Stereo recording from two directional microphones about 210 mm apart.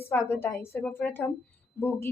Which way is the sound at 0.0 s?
10° left (ahead or behind).